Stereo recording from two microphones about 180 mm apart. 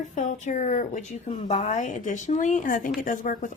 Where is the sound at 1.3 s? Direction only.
30° left (ahead or behind).